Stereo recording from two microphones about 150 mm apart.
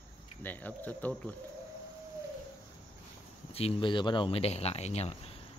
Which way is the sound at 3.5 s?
40° left (ahead or behind).